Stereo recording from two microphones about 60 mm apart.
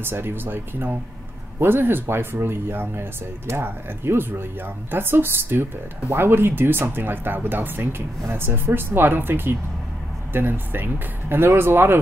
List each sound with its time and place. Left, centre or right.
0.0 s speech: right